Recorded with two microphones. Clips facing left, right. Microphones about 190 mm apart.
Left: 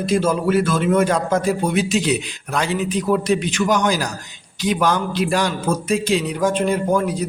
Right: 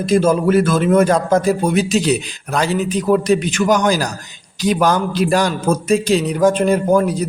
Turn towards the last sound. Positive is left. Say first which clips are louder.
# right 4 dB
turn(degrees=-40)  # may be behind; listen again after turning